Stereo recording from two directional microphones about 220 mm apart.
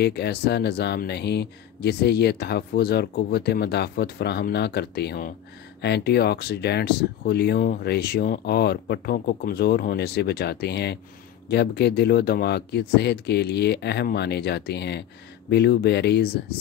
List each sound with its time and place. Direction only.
0.0 s speech: 50° left (ahead or behind)